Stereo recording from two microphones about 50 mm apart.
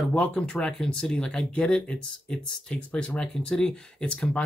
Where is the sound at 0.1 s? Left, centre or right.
Left.